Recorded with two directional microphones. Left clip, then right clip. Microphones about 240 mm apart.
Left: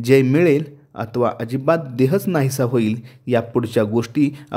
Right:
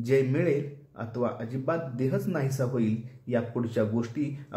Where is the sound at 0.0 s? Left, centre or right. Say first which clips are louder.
Left 11 dB; left.